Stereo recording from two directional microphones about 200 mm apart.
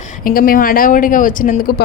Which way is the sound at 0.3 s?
45° left (ahead or behind).